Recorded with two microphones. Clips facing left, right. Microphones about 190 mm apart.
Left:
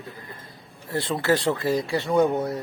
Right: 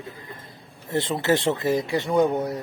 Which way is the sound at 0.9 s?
25° right (ahead or behind).